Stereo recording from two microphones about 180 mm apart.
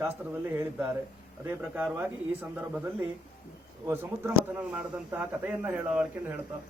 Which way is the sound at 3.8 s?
15° right (ahead or behind).